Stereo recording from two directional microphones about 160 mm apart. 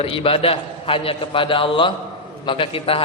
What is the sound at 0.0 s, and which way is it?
A man's voice, 35° left (ahead or behind).